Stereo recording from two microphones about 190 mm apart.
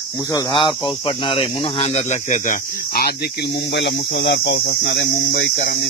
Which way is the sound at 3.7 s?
65° left (ahead or behind).